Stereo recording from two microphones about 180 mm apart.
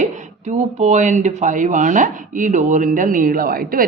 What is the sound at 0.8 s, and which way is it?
Speech, 40° right (ahead or behind).